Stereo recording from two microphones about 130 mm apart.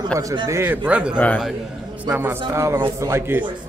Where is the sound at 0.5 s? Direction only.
15° right (ahead or behind).